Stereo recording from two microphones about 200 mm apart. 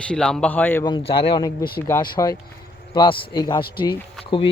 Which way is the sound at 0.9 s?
25° left (ahead or behind).